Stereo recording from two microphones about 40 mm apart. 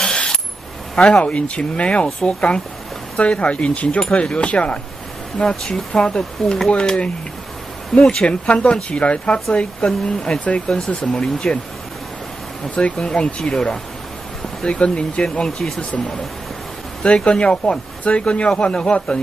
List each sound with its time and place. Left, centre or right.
0.0 s coin: left
0.9 s speech: left
8.0 s speech: centre
8.3 s speech: left
12.7 s speech: left
15.2 s speech: centre
17.0 s speech: left